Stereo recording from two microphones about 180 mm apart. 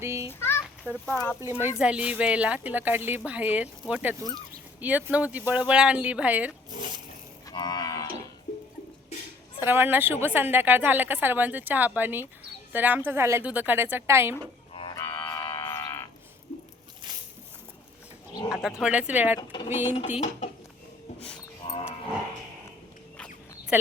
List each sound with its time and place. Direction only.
0.0 s a sound: 15° right (ahead or behind)
0.3 s a sound: 15° left (ahead or behind)
1.0 s speech: 10° left (ahead or behind)
1.4 s speech: 10° right (ahead or behind)
7.4 s cattle: 25° left (ahead or behind)
9.6 s speech: 10° right (ahead or behind)
14.7 s music: 30° left (ahead or behind)
14.9 s music: 15° left (ahead or behind)
15.7 s a sound: 15° left (ahead or behind)
18.4 s speech: 5° right (ahead or behind)
19.4 s speech: 25° left (ahead or behind)
19.7 s speech: 10° right (ahead or behind)
20.1 s speech: 40° left (ahead or behind)
23.7 s speech: 10° right (ahead or behind)